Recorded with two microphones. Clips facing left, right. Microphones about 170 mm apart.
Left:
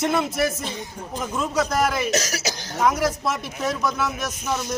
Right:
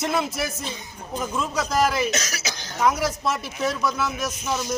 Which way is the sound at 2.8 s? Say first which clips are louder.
Left 1 dB; centre (ahead or behind).